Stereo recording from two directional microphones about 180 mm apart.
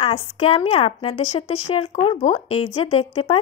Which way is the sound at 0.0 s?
35° left (ahead or behind).